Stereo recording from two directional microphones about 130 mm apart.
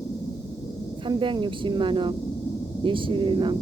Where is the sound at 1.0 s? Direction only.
40° right (ahead or behind).